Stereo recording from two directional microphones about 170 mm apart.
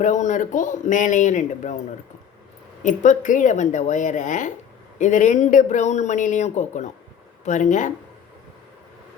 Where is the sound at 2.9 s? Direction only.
50° left (ahead or behind).